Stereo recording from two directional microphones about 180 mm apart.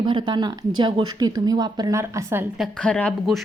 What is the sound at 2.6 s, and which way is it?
Speech, 5° left (ahead or behind).